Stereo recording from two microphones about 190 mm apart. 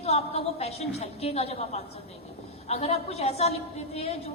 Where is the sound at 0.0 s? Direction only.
35° left (ahead or behind).